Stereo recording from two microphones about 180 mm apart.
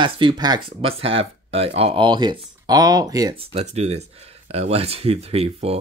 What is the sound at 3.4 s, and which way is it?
Speech, 35° right (ahead or behind).